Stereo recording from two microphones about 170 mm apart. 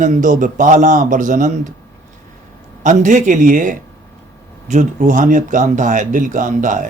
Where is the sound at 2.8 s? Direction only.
45° right (ahead or behind).